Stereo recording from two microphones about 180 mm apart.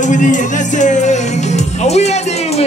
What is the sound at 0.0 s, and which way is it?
Music, 45° left (ahead or behind).